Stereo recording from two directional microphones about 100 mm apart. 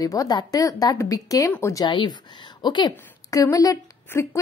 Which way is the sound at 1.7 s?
50° left (ahead or behind).